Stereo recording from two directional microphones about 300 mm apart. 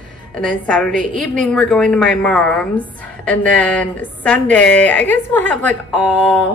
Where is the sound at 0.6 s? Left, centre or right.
Centre.